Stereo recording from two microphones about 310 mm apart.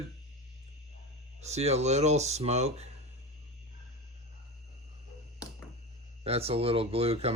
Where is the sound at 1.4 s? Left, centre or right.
Right.